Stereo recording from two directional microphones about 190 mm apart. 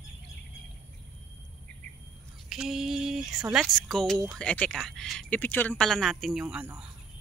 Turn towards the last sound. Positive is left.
turn(degrees=-5)  # may be behind; listen again after turning